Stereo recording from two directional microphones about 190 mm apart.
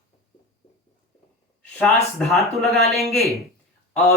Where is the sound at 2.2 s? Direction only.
Centre (ahead or behind).